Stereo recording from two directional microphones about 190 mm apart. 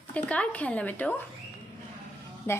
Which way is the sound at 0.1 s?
5° left (ahead or behind).